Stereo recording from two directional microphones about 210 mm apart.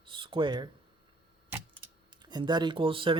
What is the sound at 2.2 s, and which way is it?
Speech, 20° right (ahead or behind).